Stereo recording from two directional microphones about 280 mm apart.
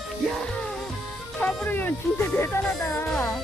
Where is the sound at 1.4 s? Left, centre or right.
Centre.